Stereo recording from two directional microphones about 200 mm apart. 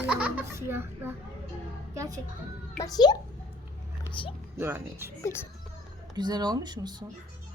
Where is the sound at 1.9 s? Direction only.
20° right (ahead or behind).